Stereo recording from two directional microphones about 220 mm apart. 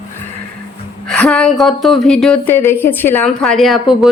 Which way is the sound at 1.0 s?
5° left (ahead or behind).